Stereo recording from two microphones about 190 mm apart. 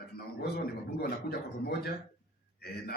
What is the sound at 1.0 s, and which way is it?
Speech, 55° left (ahead or behind).